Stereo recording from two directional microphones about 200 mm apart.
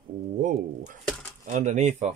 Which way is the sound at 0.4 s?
40° right (ahead or behind).